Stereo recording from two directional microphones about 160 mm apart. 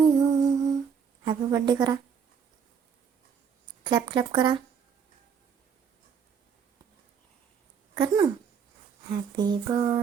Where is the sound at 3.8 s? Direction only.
25° right (ahead or behind).